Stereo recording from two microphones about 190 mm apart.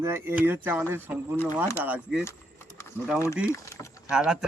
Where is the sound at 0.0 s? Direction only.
15° right (ahead or behind).